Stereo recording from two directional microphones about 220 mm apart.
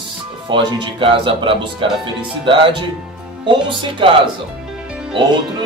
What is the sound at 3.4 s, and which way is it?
Speech, 25° right (ahead or behind).